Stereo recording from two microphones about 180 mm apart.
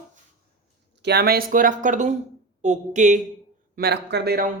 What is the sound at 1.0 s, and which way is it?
Speech, 65° right (ahead or behind).